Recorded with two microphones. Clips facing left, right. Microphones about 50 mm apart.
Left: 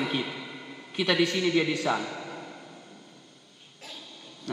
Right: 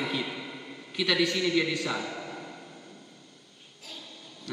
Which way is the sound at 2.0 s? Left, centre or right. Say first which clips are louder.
Left 1 dB; centre.